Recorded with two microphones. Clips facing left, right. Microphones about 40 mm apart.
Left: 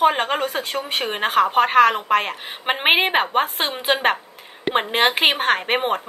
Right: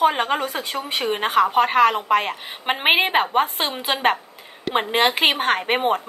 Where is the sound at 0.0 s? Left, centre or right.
Centre.